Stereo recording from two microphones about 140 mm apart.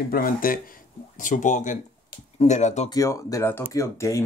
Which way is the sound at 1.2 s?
65° left (ahead or behind).